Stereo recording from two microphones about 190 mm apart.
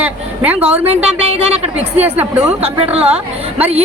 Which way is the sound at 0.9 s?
30° right (ahead or behind).